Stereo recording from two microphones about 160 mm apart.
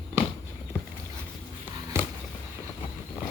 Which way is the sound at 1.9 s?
15° right (ahead or behind).